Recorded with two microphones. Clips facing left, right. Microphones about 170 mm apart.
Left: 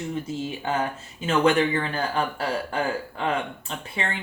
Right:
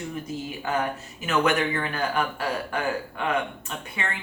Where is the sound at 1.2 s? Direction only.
30° left (ahead or behind).